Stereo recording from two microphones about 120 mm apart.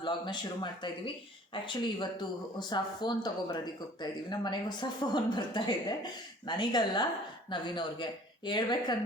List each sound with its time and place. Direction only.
0.0 s speech: 40° left (ahead or behind)